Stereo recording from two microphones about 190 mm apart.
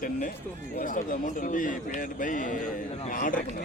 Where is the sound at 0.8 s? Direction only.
45° left (ahead or behind).